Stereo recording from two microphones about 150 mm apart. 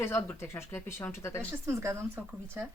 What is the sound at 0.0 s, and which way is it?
Speech, 15° left (ahead or behind).